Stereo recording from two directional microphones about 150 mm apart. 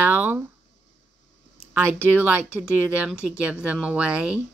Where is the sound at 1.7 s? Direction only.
15° right (ahead or behind).